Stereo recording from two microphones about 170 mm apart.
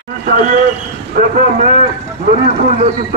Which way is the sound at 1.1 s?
50° right (ahead or behind).